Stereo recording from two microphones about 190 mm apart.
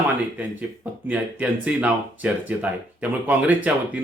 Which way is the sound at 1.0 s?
5° right (ahead or behind).